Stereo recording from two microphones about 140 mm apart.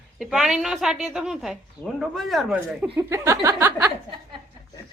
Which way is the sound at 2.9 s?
20° right (ahead or behind).